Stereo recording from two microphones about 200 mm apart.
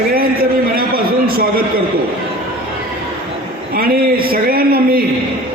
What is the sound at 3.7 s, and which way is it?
Speech, 50° right (ahead or behind).